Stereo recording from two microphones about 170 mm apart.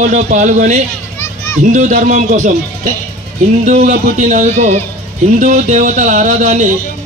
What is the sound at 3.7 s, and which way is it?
A man's voice, 45° right (ahead or behind).